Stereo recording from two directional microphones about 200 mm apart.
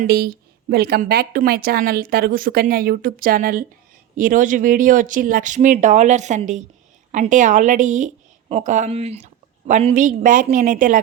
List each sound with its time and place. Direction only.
0.0 s a woman's voice: 50° right (ahead or behind)